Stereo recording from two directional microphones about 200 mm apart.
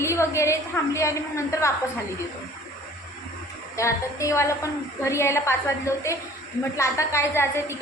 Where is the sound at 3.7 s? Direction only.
15° left (ahead or behind).